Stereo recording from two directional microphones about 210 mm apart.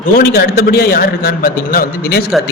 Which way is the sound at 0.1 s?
45° left (ahead or behind).